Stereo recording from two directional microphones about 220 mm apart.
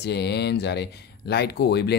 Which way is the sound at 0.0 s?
50° left (ahead or behind).